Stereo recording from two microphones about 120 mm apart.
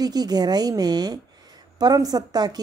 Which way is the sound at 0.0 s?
35° right (ahead or behind).